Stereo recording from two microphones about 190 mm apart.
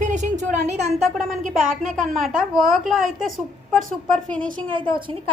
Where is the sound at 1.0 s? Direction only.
Centre (ahead or behind).